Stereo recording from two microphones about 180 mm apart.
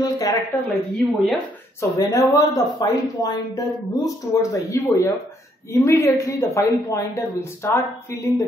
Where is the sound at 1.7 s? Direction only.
15° left (ahead or behind).